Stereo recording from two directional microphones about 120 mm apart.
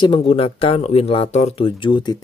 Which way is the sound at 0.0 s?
45° left (ahead or behind).